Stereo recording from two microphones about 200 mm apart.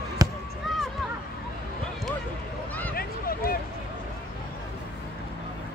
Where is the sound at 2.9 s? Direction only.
50° left (ahead or behind).